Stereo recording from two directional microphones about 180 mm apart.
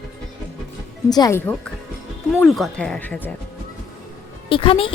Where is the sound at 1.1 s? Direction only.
20° left (ahead or behind).